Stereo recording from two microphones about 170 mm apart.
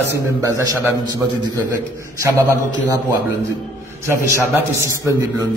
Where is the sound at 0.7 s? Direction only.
20° right (ahead or behind).